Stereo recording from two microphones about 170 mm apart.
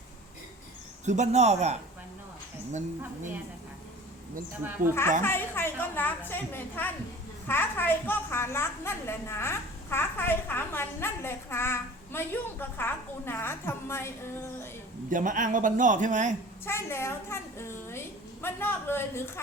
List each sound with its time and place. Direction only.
1.0 s speech: 45° right (ahead or behind)
4.8 s a man's voice: 50° right (ahead or behind)
5.2 s a woman's voice: 15° left (ahead or behind)
15.1 s a man's voice: 50° right (ahead or behind)
16.6 s a woman's voice: 15° left (ahead or behind)